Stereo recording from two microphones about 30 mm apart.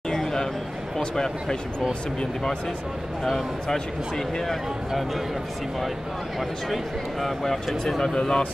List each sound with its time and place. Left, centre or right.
0.1 s a sound: centre
1.1 s speech: left
6.7 s speech: centre
8.0 s speech: left